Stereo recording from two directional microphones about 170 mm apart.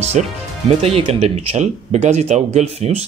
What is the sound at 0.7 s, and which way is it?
Speech, 35° right (ahead or behind).